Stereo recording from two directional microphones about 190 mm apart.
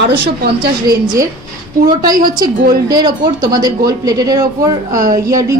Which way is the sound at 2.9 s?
20° right (ahead or behind).